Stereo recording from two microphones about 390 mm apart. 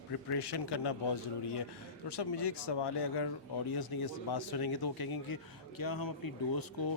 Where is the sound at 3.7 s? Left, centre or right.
Left.